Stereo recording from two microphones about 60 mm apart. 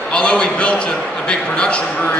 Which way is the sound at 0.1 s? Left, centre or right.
Centre.